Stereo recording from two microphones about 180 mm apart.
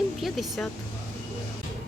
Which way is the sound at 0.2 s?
Centre (ahead or behind).